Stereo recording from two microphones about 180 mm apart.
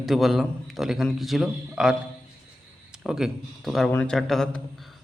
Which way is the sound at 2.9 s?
5° right (ahead or behind).